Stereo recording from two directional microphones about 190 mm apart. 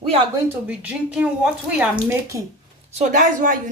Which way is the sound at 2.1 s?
15° right (ahead or behind).